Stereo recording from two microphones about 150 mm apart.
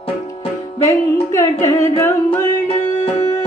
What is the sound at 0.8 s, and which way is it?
Music, 20° left (ahead or behind).